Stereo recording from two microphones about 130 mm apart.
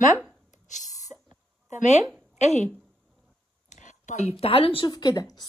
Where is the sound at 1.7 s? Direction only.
65° left (ahead or behind).